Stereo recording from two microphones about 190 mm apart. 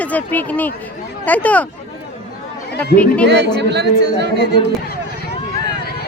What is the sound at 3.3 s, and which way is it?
Speech, 60° right (ahead or behind).